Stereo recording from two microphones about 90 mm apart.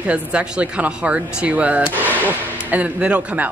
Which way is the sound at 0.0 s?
15° right (ahead or behind).